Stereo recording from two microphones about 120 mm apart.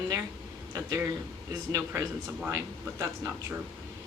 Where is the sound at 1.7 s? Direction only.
30° right (ahead or behind).